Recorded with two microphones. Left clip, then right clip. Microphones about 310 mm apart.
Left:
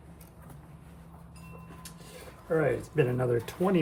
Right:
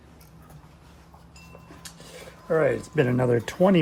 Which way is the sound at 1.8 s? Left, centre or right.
Right.